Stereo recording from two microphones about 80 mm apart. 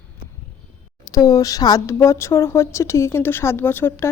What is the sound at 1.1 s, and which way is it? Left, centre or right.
Speech, left.